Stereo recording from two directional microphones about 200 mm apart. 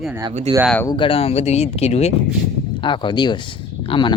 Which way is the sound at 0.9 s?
25° left (ahead or behind).